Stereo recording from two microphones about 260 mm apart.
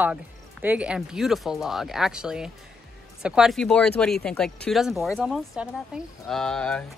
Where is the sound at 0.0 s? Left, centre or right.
Centre.